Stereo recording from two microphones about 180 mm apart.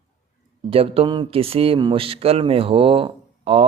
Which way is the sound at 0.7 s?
30° right (ahead or behind).